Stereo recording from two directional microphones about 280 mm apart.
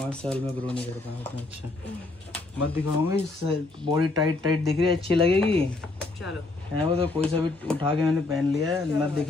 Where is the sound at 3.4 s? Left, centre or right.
Centre.